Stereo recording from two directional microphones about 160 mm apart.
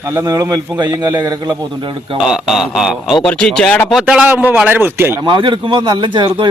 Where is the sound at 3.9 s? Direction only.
5° right (ahead or behind).